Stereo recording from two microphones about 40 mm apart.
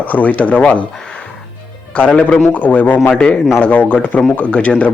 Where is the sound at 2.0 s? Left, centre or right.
Left.